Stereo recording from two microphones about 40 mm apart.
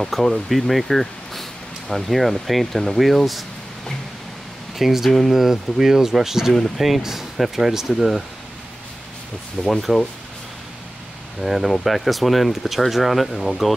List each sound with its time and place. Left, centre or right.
0.0 s speech: centre
4.7 s speech: centre
6.5 s speech: centre
9.7 s speech: centre
11.4 s speech: centre